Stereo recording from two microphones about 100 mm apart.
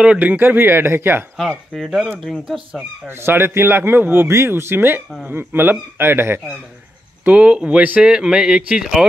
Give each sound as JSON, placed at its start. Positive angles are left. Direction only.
{"t": 0.0, "sound": "speech", "side_deg": -15}
{"t": 1.3, "sound": "speech", "side_deg": 5}
{"t": 3.1, "sound": "speech", "side_deg": -25}
{"t": 7.2, "sound": "a man's voice", "side_deg": -10}